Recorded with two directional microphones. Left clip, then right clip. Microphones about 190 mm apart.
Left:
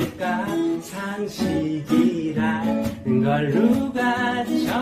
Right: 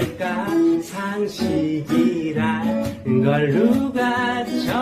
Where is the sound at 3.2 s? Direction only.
Centre (ahead or behind).